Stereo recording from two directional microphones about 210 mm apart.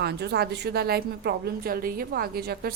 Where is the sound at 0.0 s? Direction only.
50° right (ahead or behind).